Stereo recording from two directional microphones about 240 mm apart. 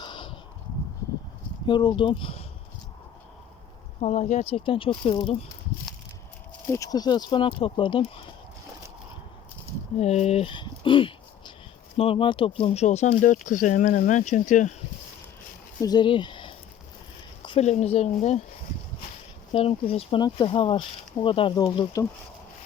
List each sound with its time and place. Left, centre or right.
0.0 s a sound: centre
1.6 s speech: centre
4.0 s speech: left
6.7 s speech: centre
10.0 s speech: left
15.8 s speech: centre
19.5 s speech: left